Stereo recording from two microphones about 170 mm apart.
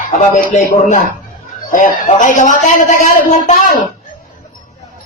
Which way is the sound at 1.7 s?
50° left (ahead or behind).